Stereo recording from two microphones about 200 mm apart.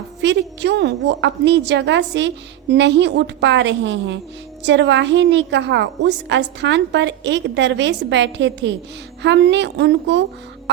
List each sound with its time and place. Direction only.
0.2 s a woman's voice: 60° right (ahead or behind)